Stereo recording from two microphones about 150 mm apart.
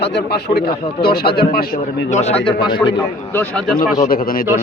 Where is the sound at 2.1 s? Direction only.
45° left (ahead or behind).